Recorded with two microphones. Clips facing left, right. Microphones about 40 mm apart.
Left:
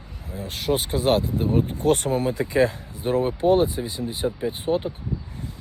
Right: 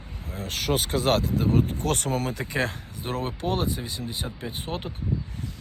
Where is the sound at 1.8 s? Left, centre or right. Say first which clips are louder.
Left 7 dB; left.